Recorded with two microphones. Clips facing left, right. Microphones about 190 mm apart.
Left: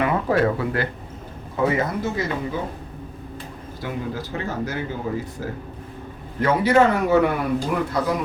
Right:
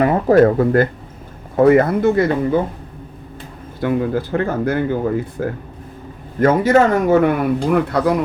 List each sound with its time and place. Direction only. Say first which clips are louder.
0.0 s speech: right 8 dB; 40° right (ahead or behind); by 2.6 s 55° right (ahead or behind)
3.8 s speech: right 11 dB; 60° right (ahead or behind)
6.4 s speech: right 4 dB; 45° right (ahead or behind)
7.7 s speech: right 7 dB; 60° right (ahead or behind)